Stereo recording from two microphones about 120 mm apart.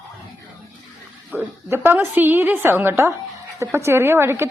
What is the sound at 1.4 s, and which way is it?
A woman's voice, 20° right (ahead or behind).